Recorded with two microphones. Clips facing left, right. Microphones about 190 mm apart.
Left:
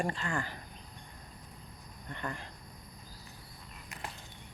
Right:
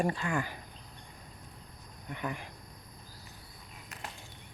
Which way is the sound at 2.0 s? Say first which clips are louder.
Right 3 dB; 10° right (ahead or behind).